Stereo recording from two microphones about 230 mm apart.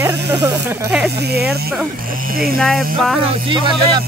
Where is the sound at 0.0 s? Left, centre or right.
Centre.